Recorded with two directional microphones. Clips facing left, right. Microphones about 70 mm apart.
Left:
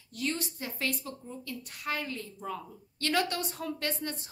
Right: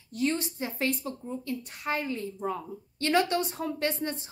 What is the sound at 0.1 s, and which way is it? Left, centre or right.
Speech, right.